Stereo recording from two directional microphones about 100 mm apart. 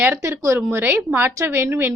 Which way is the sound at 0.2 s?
30° right (ahead or behind).